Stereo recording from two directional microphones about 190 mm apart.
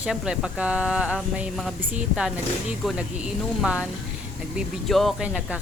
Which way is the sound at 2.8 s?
Centre (ahead or behind).